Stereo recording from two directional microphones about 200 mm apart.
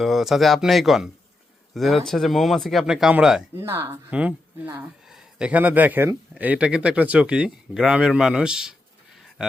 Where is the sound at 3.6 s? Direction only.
15° right (ahead or behind).